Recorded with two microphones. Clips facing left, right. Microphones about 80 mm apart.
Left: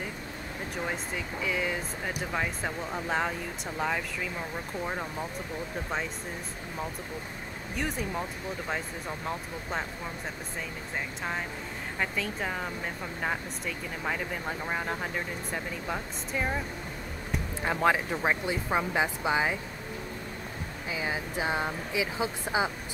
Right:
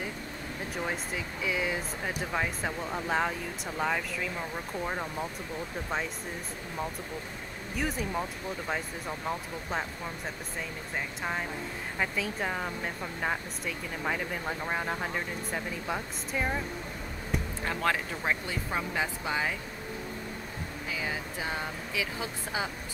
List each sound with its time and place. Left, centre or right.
0.8 s speech: centre
7.7 s speech: centre
12.0 s speech: centre
17.6 s speech: centre
20.9 s speech: left